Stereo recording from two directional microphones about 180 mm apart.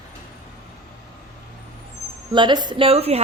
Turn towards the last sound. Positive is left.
turn(degrees=-35)  # may be behind; listen again after turning